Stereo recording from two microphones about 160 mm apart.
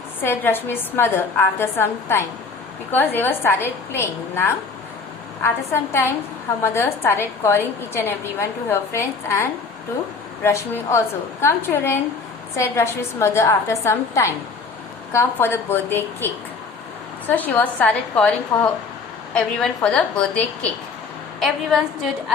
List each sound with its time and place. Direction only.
0.2 s a woman's voice: 15° left (ahead or behind)